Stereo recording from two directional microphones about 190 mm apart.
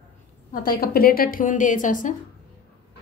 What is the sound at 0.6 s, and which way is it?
A woman's voice, 50° left (ahead or behind).